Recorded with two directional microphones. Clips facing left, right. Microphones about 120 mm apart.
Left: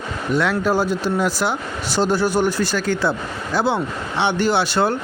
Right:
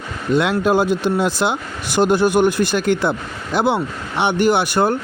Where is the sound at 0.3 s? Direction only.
20° right (ahead or behind).